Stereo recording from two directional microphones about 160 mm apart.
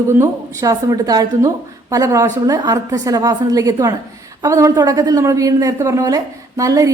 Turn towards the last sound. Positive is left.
turn(degrees=-20)  # may be behind; listen again after turning